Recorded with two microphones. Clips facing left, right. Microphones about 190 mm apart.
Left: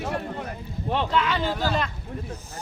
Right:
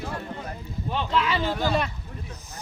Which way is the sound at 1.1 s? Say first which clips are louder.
Right 3 dB; centre (ahead or behind).